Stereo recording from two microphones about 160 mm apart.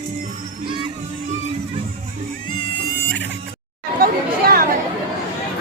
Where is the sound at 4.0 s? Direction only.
65° right (ahead or behind).